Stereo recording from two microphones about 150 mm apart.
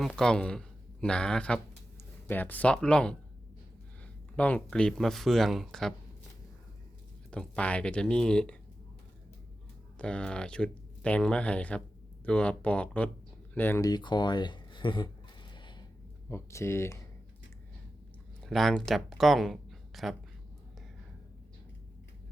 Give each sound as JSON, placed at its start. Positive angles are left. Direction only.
{"t": 0.0, "sound": "speech", "side_deg": 5}
{"t": 7.3, "sound": "speech", "side_deg": 5}
{"t": 10.0, "sound": "speech", "side_deg": 5}
{"t": 13.9, "sound": "speech", "side_deg": 30}
{"t": 15.5, "sound": "a sound", "side_deg": 30}
{"t": 16.3, "sound": "speech", "side_deg": 20}
{"t": 18.4, "sound": "speech", "side_deg": 0}